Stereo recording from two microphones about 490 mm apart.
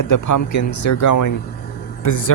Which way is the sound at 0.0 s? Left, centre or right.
Left.